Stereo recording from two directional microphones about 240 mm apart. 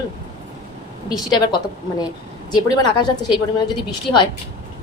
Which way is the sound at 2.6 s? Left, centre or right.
Centre.